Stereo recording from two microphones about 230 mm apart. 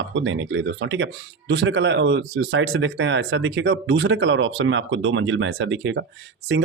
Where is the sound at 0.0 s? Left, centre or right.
Right.